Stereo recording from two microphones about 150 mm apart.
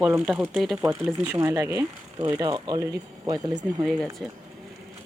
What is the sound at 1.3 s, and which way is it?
Speech, 15° right (ahead or behind).